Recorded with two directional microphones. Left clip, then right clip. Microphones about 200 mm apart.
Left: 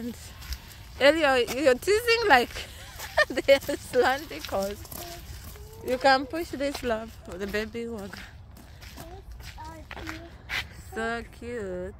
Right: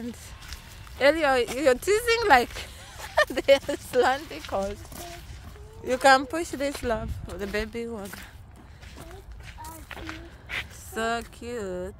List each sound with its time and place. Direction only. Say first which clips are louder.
0.5 s speech: even; 10° left (ahead or behind)
5.9 s speech: right 3 dB; 15° right (ahead or behind)
9.8 s a sound: left 1 dB; 10° left (ahead or behind)
11.5 s speech: right 1 dB; 5° right (ahead or behind)